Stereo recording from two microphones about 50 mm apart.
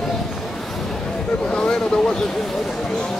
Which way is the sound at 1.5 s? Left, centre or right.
Centre.